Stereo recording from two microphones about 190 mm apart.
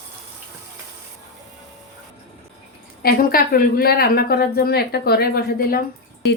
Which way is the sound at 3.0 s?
50° left (ahead or behind).